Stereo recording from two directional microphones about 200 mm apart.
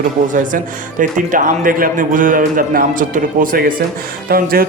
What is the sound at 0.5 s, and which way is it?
Speech, 40° right (ahead or behind).